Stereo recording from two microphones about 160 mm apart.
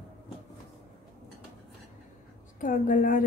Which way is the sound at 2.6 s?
55° left (ahead or behind).